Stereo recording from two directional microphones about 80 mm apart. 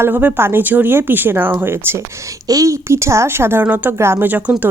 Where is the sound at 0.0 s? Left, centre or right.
Right.